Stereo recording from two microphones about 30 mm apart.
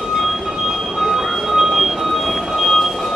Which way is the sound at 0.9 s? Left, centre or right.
Centre.